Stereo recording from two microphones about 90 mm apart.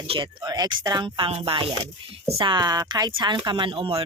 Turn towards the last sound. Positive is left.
turn(degrees=-70)  # may be behind; listen again after turning